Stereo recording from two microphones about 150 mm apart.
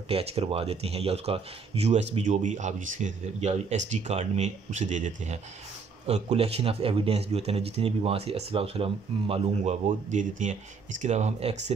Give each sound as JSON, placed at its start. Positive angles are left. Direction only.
{"t": 0.1, "sound": "speech", "side_deg": -40}